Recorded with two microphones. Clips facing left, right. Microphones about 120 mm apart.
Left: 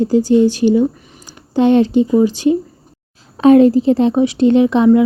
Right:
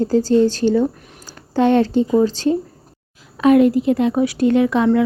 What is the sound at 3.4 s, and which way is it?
A woman's voice, 30° left (ahead or behind).